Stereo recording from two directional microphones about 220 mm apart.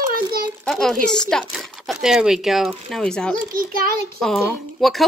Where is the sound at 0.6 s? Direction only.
Centre (ahead or behind).